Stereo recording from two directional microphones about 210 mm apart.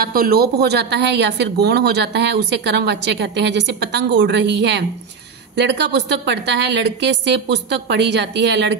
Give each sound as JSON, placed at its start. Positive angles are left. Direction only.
{"t": 0.0, "sound": "a woman's voice", "side_deg": -45}